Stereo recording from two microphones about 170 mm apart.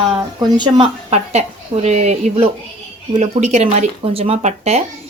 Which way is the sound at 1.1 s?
40° right (ahead or behind).